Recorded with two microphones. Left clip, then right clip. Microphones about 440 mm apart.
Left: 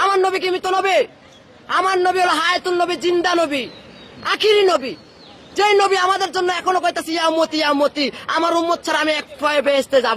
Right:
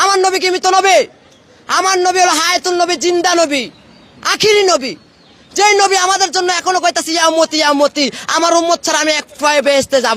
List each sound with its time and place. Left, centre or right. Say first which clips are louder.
0.0 s a man's voice: right 5 dB; right